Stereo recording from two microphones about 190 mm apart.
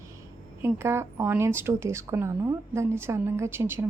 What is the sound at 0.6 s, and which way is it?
A woman's voice, 15° right (ahead or behind).